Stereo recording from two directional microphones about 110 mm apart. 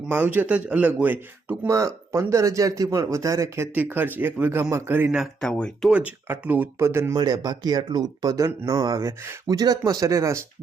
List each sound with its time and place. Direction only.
0.1 s speech: 15° right (ahead or behind)
1.6 s speech: 30° right (ahead or behind)
5.1 s speech: centre (ahead or behind)
5.9 s speech: 15° right (ahead or behind)
7.4 s speech: 40° right (ahead or behind)